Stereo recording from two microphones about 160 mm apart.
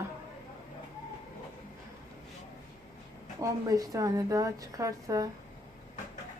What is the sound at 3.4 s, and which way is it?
A woman's voice, 20° right (ahead or behind).